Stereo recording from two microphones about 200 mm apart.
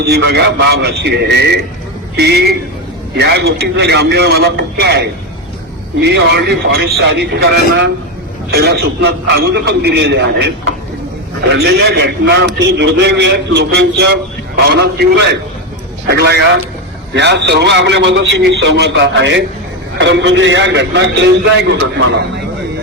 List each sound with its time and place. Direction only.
0.1 s a man's voice: 55° right (ahead or behind)